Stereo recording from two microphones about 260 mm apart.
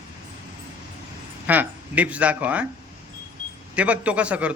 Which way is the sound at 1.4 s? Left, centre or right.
Centre.